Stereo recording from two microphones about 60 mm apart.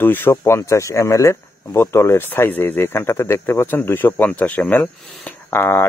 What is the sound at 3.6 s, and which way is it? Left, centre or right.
Speech, left.